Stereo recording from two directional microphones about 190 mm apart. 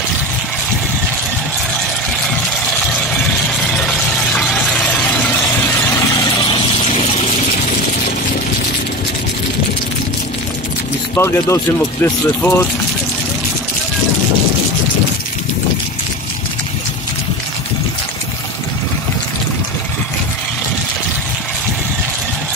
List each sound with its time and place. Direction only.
3.7 s a sound: 5° left (ahead or behind)
6.2 s vehicle: 25° left (ahead or behind)
11.1 s speech: 15° left (ahead or behind)